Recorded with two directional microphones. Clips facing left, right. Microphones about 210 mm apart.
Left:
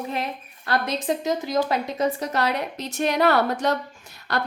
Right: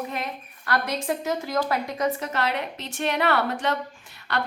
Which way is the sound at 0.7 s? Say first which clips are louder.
Left 2 dB; 20° left (ahead or behind).